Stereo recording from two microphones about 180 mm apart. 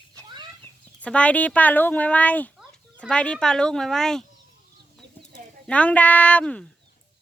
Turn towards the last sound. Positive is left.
turn(degrees=5)  # may be behind; listen again after turning